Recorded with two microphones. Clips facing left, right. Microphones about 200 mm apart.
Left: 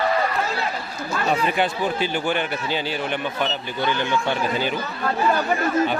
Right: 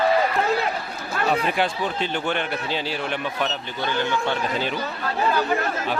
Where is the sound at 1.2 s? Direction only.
Centre (ahead or behind).